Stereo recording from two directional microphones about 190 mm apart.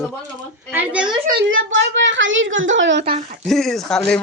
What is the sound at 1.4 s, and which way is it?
A woman's voice, 85° right.